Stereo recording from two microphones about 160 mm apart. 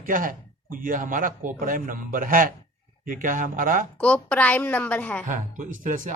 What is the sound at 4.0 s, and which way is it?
A woman's voice, 10° left (ahead or behind).